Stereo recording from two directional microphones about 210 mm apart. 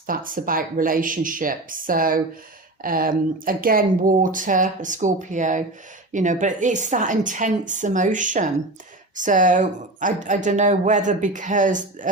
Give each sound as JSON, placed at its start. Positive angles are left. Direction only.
{"t": 0.1, "sound": "speech", "side_deg": -40}